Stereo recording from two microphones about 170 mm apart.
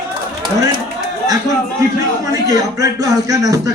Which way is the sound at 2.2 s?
20° right (ahead or behind).